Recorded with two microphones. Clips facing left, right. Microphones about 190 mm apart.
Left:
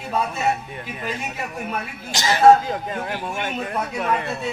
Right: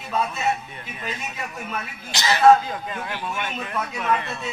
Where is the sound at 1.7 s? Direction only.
45° left (ahead or behind).